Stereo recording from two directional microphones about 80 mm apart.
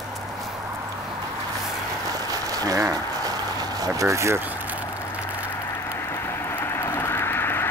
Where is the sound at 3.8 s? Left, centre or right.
Right.